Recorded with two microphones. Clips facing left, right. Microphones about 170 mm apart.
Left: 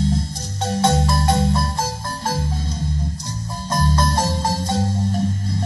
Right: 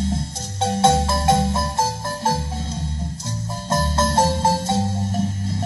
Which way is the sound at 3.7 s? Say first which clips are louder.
Even; 25° right (ahead or behind).